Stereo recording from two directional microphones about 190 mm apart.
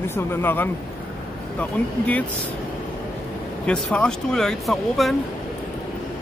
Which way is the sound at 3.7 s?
5° left (ahead or behind).